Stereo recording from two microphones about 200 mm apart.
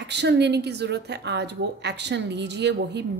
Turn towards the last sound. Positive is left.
turn(degrees=-60)  # may be behind; listen again after turning